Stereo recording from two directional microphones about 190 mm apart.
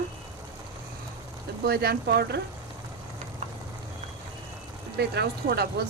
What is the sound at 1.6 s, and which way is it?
Speech, 55° right (ahead or behind).